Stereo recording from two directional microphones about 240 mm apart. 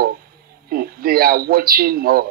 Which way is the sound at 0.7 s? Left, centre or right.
Right.